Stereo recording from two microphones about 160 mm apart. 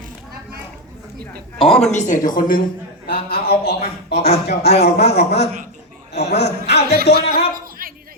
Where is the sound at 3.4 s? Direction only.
75° left (ahead or behind).